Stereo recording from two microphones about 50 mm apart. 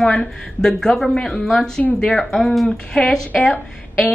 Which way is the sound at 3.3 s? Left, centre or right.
Left.